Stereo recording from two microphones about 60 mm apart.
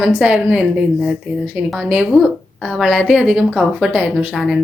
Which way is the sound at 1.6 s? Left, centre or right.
Right.